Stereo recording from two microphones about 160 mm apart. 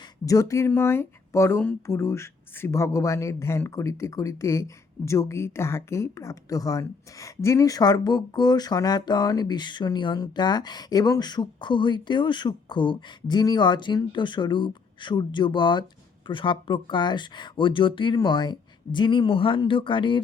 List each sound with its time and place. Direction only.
0.3 s speech: 20° left (ahead or behind)